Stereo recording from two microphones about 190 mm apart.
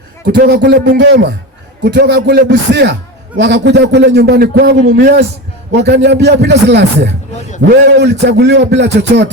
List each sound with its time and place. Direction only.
0.3 s a man's voice: 65° right (ahead or behind)